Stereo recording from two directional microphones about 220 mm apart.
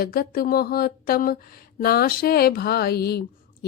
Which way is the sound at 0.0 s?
40° left (ahead or behind).